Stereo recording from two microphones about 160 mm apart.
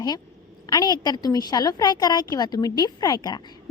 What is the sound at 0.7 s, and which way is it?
A woman's voice, 25° left (ahead or behind).